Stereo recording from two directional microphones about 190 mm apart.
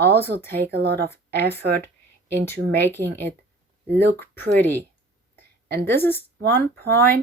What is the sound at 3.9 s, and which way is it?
Speech, 60° right (ahead or behind).